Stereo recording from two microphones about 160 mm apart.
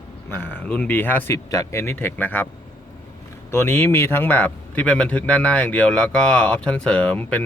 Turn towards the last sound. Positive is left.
turn(degrees=10)  # may be behind; listen again after turning